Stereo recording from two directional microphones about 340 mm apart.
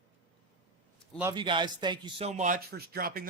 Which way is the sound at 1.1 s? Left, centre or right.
Centre.